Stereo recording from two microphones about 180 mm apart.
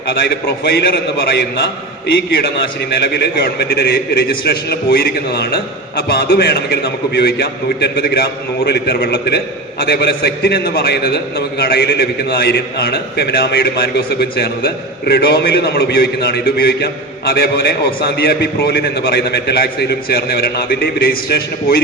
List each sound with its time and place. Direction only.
0.1 s a man's voice: 65° left (ahead or behind)